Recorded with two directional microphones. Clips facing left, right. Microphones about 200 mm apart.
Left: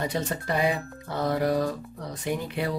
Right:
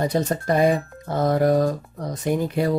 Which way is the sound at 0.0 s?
40° right (ahead or behind).